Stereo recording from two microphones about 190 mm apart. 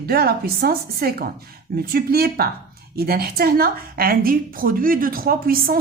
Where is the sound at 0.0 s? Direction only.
55° right (ahead or behind).